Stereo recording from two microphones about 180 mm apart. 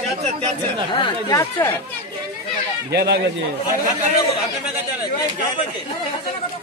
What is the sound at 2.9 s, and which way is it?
Speech, 65° right (ahead or behind).